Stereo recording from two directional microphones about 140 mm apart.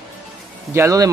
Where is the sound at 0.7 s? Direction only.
20° right (ahead or behind).